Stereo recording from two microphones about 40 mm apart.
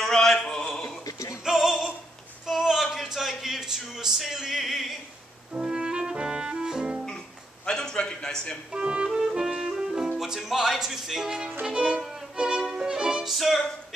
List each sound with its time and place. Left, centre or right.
0.0 s a sound: centre
1.4 s music: centre
2.5 s a sound: centre
4.2 s music: centre
5.5 s music: right
7.6 s a sound: centre
8.7 s music: right
10.2 s speech: centre
11.6 s music: centre
12.0 s violin: centre
13.2 s music: centre